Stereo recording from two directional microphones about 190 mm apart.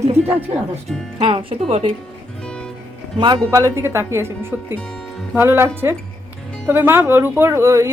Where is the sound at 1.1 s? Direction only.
25° right (ahead or behind).